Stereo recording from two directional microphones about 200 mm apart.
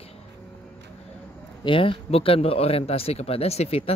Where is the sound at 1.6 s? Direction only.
25° left (ahead or behind).